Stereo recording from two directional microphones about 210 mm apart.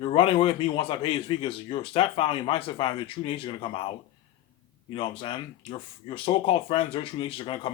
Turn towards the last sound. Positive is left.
turn(degrees=25)  # may be behind; listen again after turning